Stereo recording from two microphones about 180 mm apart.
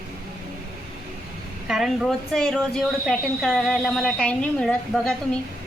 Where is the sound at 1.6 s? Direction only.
Centre (ahead or behind).